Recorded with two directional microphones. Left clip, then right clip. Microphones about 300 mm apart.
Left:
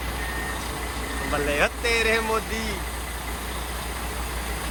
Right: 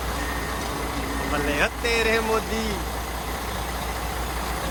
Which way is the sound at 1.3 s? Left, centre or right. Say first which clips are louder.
Left 1 dB; centre.